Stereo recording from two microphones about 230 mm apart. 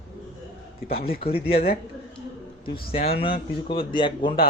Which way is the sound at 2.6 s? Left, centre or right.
Left.